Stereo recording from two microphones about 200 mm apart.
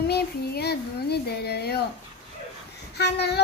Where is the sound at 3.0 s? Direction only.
55° left (ahead or behind).